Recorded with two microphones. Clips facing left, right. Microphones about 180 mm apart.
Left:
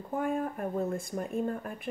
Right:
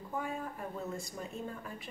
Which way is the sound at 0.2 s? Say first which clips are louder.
Left 11 dB; 55° left (ahead or behind).